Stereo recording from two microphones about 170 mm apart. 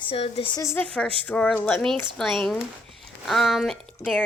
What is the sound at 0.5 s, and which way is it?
A woman's voice, 15° left (ahead or behind).